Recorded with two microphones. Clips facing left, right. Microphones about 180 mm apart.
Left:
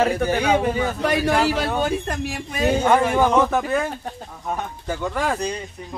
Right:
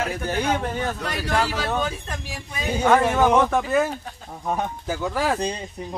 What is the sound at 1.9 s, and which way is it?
Speech, 65° left (ahead or behind).